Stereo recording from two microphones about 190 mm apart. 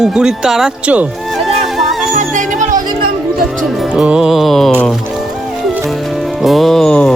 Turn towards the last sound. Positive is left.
turn(degrees=5)  # may be behind; listen again after turning